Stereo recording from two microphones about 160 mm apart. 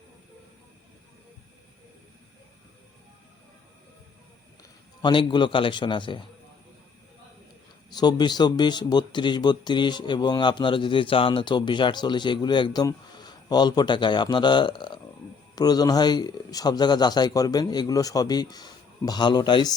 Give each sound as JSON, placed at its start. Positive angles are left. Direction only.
{"t": 5.0, "sound": "a man's voice", "side_deg": 30}
{"t": 7.9, "sound": "speech", "side_deg": 25}